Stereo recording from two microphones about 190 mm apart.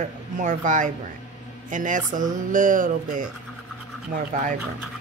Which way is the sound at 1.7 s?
45° right (ahead or behind).